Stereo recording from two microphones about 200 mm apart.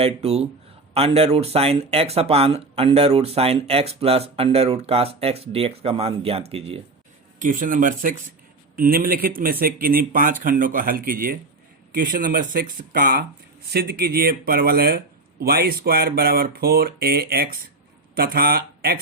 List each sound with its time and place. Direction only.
0.0 s speech: 30° right (ahead or behind)
7.3 s speech: 40° right (ahead or behind)